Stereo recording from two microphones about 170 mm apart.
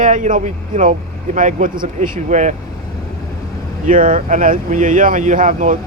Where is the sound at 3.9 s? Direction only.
50° right (ahead or behind).